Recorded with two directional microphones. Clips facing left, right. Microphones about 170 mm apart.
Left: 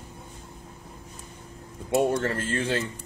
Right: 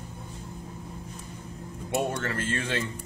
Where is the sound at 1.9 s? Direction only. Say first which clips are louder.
Left 5 dB; 35° left (ahead or behind).